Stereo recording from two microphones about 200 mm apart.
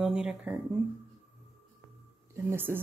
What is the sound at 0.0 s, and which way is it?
Speech, 5° right (ahead or behind).